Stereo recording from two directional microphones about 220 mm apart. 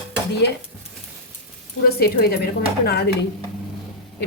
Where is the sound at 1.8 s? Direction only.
45° left (ahead or behind).